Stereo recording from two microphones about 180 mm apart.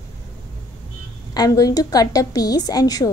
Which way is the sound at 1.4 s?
20° left (ahead or behind).